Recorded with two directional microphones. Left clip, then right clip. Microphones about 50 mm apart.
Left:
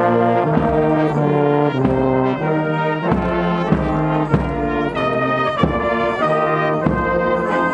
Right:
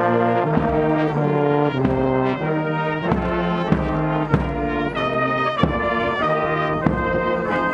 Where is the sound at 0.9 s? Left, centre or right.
Right.